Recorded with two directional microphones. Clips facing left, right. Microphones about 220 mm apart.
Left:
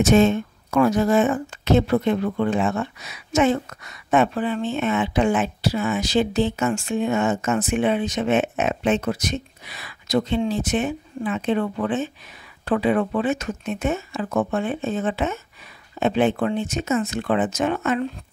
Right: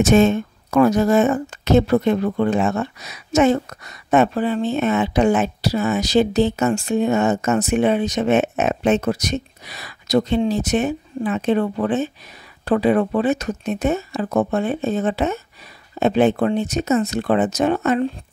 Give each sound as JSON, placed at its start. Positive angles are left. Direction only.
{"t": 0.0, "sound": "speech", "side_deg": -45}